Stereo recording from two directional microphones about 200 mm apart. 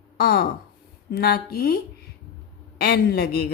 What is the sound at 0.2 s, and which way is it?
Speech, 50° left (ahead or behind).